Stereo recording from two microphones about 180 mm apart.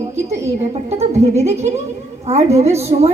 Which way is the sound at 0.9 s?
35° right (ahead or behind).